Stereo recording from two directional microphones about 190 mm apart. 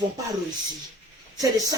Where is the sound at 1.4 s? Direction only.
20° right (ahead or behind).